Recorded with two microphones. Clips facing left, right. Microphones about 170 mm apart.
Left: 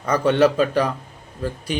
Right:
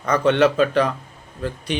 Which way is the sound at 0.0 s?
10° left (ahead or behind).